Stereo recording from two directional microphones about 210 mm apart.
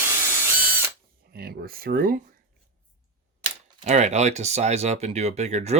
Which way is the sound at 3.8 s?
35° right (ahead or behind).